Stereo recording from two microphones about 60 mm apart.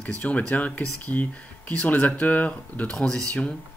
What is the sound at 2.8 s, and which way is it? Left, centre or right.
Speech, centre.